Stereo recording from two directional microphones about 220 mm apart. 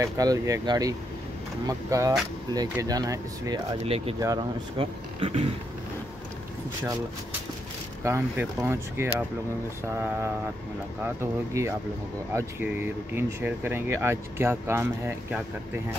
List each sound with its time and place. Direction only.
0.0 s speech: 15° right (ahead or behind)
8.0 s speech: 10° right (ahead or behind)
11.1 s speech: 10° right (ahead or behind)